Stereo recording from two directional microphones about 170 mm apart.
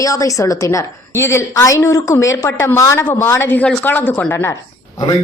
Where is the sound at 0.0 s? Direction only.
20° left (ahead or behind).